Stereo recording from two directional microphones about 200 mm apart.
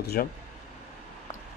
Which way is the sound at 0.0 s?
50° left (ahead or behind).